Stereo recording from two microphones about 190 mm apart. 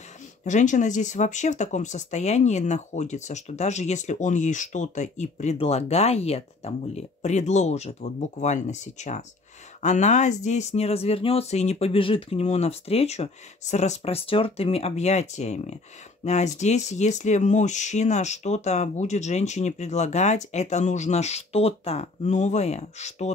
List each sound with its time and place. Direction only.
0.5 s speech: 40° left (ahead or behind)